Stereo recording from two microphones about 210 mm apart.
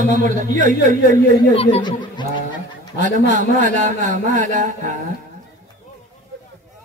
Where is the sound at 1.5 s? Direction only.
25° left (ahead or behind).